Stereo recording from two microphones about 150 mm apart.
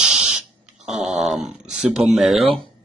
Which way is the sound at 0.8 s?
5° right (ahead or behind).